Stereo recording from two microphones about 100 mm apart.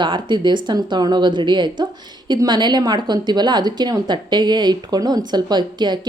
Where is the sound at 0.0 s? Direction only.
50° right (ahead or behind).